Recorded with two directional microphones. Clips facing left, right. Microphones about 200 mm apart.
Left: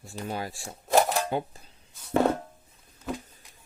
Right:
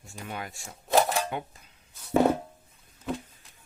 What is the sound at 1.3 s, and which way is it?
Dishes, 30° left (ahead or behind).